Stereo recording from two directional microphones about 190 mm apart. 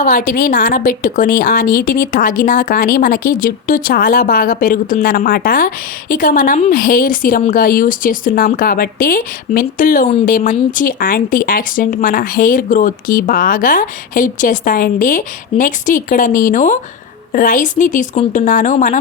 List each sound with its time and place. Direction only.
0.0 s a woman's voice: 45° left (ahead or behind)